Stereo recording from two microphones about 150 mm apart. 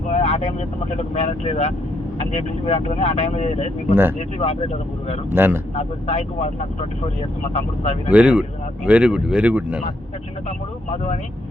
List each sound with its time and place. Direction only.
0.1 s vehicle: 40° left (ahead or behind)
0.9 s speech: 45° left (ahead or behind)
5.3 s speech: 15° right (ahead or behind)
5.7 s speech: 45° left (ahead or behind)
8.1 s speech: 10° right (ahead or behind)
10.9 s speech: 45° left (ahead or behind)